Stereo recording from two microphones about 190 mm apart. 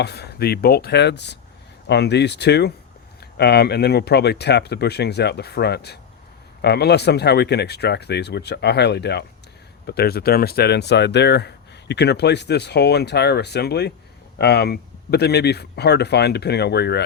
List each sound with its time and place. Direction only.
0.0 s speech: 60° left (ahead or behind)